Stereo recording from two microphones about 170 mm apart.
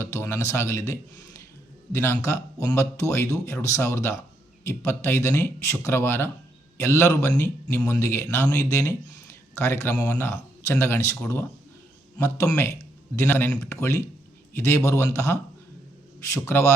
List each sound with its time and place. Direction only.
0.0 s a man's voice: 15° left (ahead or behind)